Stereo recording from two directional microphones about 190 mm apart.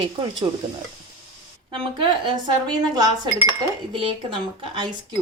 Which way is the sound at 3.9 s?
25° right (ahead or behind).